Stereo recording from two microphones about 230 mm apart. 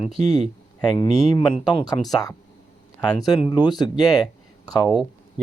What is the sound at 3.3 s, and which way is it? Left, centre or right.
Speech, centre.